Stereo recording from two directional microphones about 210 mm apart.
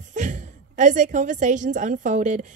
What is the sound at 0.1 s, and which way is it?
A woman's voice, 35° right (ahead or behind).